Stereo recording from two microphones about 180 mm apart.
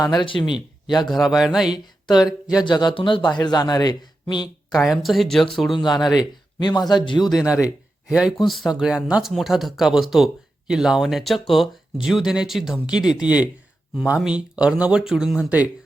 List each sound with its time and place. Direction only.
0.0 s a man's voice: 25° left (ahead or behind)
1.1 s speech: centre (ahead or behind)
2.6 s a man's voice: 25° left (ahead or behind)
4.8 s speech: centre (ahead or behind)
5.8 s a man's voice: 25° left (ahead or behind)
8.0 s speech: centre (ahead or behind)